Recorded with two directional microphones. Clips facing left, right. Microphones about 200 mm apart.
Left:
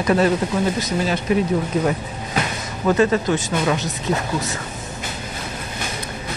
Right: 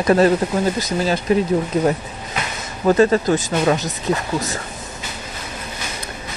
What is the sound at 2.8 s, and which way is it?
Speech, 35° right (ahead or behind).